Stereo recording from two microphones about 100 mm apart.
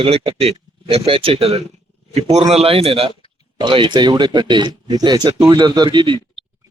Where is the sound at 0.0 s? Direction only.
70° right (ahead or behind).